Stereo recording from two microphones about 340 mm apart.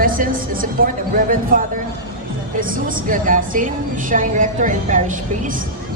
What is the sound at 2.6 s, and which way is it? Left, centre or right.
Speech, right.